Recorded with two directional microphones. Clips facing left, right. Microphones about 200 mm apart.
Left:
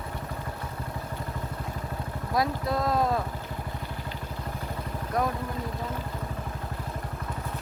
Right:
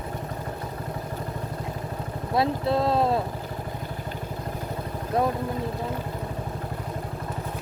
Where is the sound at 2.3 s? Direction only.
25° right (ahead or behind).